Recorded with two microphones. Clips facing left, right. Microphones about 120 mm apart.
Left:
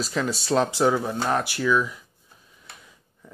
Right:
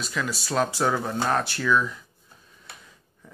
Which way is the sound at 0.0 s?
35° left (ahead or behind).